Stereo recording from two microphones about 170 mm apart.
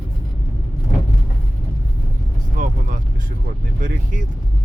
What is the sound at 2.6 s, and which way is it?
Vehicle, 50° right (ahead or behind).